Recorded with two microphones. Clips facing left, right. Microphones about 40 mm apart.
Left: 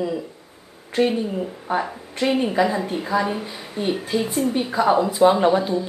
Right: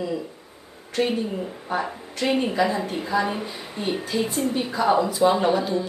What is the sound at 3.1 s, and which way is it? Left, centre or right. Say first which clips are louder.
A woman's voice: left 1 dB; centre.